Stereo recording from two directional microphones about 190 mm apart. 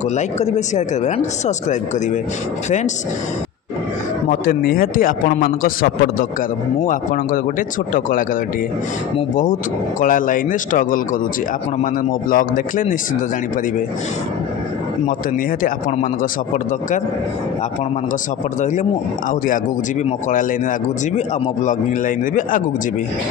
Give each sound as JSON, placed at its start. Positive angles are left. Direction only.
{"t": 0.1, "sound": "speech", "side_deg": 35}
{"t": 4.3, "sound": "a man's voice", "side_deg": 50}
{"t": 9.4, "sound": "a man's voice", "side_deg": 45}
{"t": 15.6, "sound": "a man's voice", "side_deg": 45}
{"t": 18.6, "sound": "speech", "side_deg": 40}
{"t": 20.1, "sound": "a man's voice", "side_deg": 40}
{"t": 21.6, "sound": "a man's voice", "side_deg": 45}